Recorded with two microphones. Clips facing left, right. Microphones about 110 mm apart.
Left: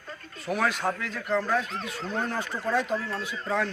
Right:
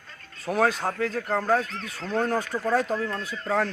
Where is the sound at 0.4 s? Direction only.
30° right (ahead or behind).